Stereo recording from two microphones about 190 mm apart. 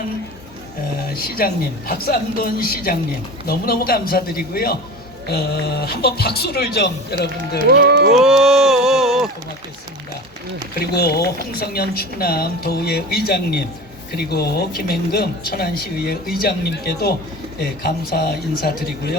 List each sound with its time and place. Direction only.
1.4 s speech: 50° left (ahead or behind)
7.6 s speech: 55° right (ahead or behind)
8.1 s speech: centre (ahead or behind)
10.8 s speech: 55° left (ahead or behind)